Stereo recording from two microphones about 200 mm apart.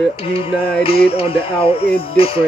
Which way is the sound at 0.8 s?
25° left (ahead or behind).